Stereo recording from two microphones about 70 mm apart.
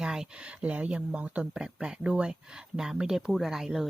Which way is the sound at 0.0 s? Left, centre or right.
Centre.